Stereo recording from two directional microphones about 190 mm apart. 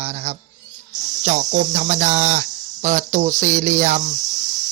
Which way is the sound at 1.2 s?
45° right (ahead or behind).